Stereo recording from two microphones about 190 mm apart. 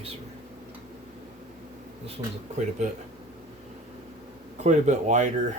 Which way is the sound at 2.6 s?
40° right (ahead or behind).